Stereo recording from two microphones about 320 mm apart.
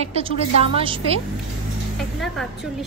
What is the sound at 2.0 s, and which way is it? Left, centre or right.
Music, centre.